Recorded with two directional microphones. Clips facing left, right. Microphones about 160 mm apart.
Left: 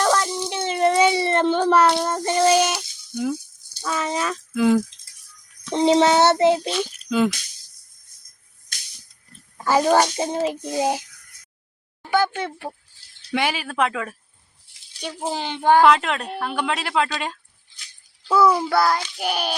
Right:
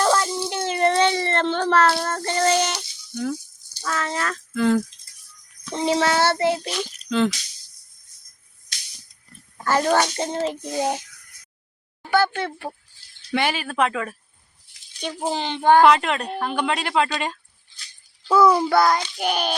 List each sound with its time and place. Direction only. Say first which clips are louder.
0.0 s a sound: even; 5° right (ahead or behind)
3.8 s a child's voice: left 2 dB; 15° left (ahead or behind)
5.7 s child singing: left 5 dB; 20° left (ahead or behind)
6.7 s speech: left 1 dB; 5° left (ahead or behind)
9.6 s a child's voice: left 2 dB; 10° left (ahead or behind)
12.1 s a child's voice: right 1 dB; 15° left (ahead or behind)
15.3 s a child's voice: right 1 dB; 10° left (ahead or behind)